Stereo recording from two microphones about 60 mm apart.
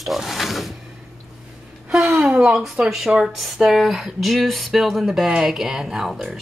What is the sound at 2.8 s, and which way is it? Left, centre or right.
Speech, right.